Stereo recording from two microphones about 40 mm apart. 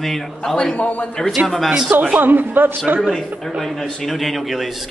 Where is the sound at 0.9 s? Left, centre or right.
Left.